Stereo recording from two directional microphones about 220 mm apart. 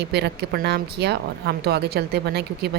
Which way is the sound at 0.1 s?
50° right (ahead or behind).